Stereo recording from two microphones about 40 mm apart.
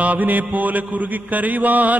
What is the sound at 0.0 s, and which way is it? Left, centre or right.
Mantra, right.